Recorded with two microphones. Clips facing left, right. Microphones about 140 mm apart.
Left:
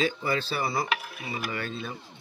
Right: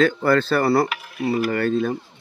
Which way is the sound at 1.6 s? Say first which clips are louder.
Right 14 dB; 50° right (ahead or behind).